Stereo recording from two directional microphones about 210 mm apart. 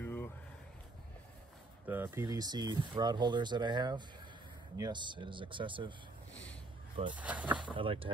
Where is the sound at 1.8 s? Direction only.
10° right (ahead or behind).